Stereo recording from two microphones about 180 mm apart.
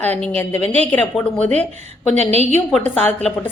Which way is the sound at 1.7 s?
40° right (ahead or behind).